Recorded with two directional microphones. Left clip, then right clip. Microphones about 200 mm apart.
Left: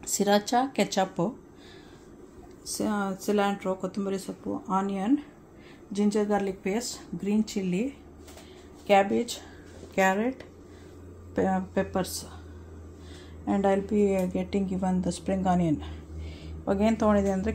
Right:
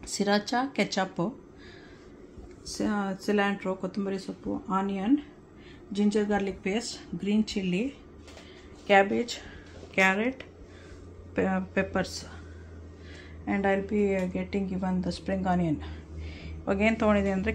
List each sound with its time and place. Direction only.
0.0 s a woman's voice: 20° left (ahead or behind)
2.8 s a woman's voice: 5° left (ahead or behind)
13.5 s a woman's voice: 20° left (ahead or behind)
16.6 s a woman's voice: 15° left (ahead or behind)